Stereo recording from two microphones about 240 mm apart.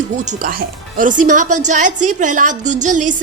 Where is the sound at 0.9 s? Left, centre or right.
Right.